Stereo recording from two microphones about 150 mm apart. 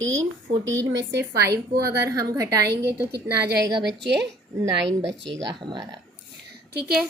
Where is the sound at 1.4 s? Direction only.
90° right.